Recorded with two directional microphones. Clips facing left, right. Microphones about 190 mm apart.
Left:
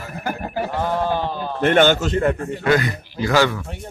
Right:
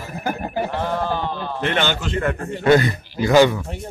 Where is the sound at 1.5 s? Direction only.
50° left (ahead or behind).